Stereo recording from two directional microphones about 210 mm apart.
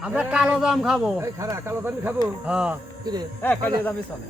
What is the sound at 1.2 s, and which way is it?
Speech, 15° right (ahead or behind).